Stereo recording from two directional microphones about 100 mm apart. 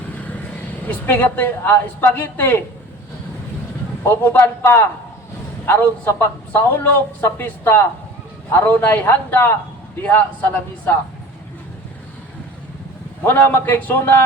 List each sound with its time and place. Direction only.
0.9 s a man's voice: 20° left (ahead or behind)
4.0 s a man's voice: 20° left (ahead or behind)
13.2 s a man's voice: 20° left (ahead or behind)